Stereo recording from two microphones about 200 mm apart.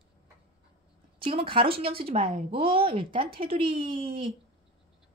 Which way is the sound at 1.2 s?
25° right (ahead or behind).